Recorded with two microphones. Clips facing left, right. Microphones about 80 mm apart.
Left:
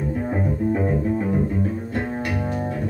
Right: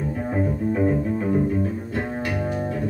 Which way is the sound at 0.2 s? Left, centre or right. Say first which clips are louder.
Right 1 dB; centre.